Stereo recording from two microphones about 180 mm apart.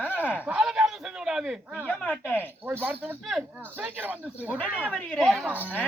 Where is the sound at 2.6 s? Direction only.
10° right (ahead or behind).